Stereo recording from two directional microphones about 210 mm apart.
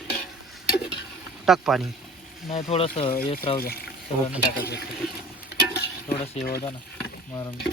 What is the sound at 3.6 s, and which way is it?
Speech, 45° left (ahead or behind).